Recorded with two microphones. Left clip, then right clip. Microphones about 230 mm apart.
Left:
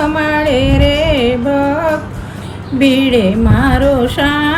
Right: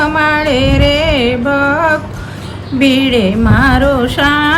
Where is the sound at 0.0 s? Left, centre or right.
Centre.